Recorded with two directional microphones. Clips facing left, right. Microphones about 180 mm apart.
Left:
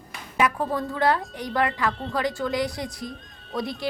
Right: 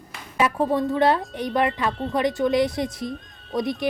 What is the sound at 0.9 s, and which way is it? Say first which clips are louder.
Speech: right 3 dB; 20° right (ahead or behind).